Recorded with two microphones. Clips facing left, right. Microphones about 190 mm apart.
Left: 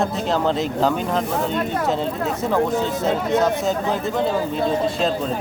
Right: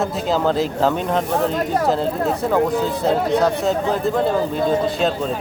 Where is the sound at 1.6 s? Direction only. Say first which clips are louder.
Right 3 dB; 40° right (ahead or behind).